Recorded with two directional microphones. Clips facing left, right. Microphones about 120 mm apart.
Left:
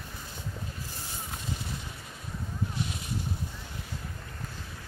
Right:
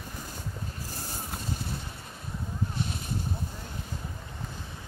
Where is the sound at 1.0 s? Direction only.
45° right (ahead or behind).